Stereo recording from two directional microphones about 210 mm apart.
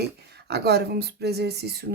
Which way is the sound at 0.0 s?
50° right (ahead or behind).